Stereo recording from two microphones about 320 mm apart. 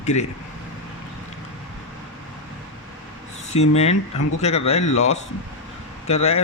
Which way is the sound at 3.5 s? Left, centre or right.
Centre.